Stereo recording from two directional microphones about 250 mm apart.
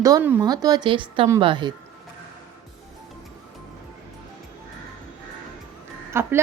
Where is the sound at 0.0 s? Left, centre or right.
Centre.